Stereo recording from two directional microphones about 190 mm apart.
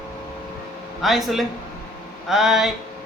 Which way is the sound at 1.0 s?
Centre (ahead or behind).